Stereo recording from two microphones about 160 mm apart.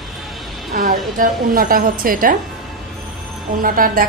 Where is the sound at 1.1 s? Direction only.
60° right (ahead or behind).